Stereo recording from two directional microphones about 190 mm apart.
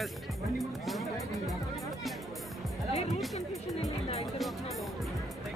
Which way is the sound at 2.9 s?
35° left (ahead or behind).